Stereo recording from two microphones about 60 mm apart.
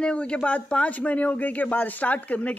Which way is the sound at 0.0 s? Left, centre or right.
Centre.